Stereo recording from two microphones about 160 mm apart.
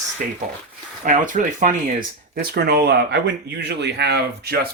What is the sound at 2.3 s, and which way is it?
Speech, 90° right.